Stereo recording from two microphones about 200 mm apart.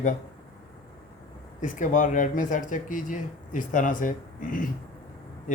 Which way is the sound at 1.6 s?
40° left (ahead or behind).